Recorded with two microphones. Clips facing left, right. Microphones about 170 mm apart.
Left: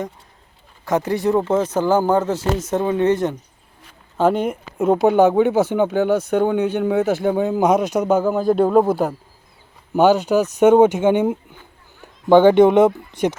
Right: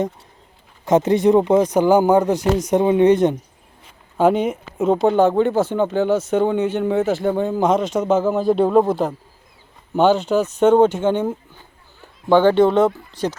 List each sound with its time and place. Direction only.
0.9 s speech: 20° right (ahead or behind)
4.2 s speech: centre (ahead or behind)
8.1 s speech: centre (ahead or behind); by 13.3 s 20° left (ahead or behind)